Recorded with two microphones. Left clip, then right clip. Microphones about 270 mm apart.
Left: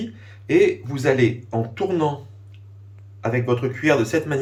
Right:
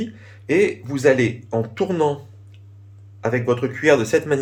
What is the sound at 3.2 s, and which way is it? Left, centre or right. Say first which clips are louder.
A man's voice: right 2 dB; centre.